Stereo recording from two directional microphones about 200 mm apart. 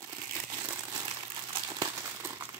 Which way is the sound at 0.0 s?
20° right (ahead or behind).